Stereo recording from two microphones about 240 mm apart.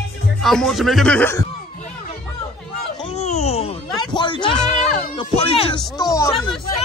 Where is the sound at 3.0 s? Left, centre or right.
Left.